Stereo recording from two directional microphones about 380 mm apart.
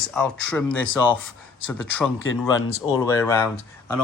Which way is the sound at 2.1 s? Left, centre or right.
Left.